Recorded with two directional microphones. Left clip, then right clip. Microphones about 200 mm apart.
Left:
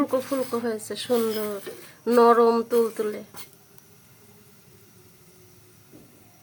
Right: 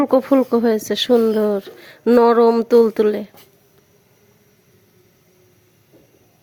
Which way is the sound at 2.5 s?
20° right (ahead or behind).